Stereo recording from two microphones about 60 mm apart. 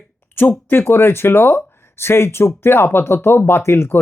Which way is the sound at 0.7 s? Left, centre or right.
Left.